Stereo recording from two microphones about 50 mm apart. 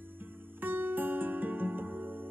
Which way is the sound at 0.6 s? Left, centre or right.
Right.